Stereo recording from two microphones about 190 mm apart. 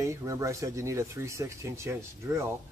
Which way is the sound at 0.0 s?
15° right (ahead or behind).